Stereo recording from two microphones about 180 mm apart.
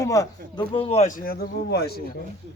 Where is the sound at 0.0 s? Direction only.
20° left (ahead or behind); by 2.0 s 65° left (ahead or behind).